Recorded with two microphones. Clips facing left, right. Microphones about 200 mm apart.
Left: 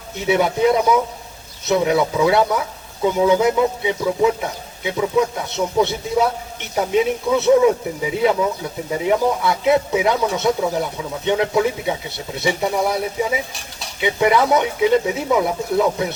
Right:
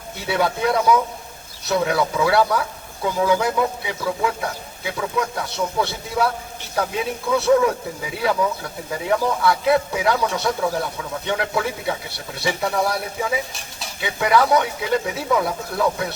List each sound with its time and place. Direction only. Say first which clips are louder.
0.3 s speech: left 5 dB; 20° left (ahead or behind)